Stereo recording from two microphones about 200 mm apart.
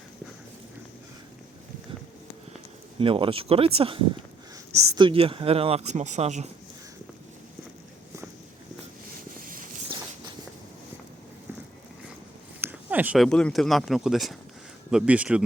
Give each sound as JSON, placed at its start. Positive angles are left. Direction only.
{"t": 3.0, "sound": "speech", "side_deg": -25}
{"t": 12.6, "sound": "speech", "side_deg": -10}